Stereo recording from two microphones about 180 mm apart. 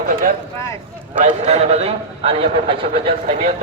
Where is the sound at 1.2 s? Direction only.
40° right (ahead or behind).